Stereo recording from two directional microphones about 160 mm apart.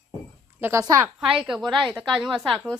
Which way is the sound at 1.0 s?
5° right (ahead or behind).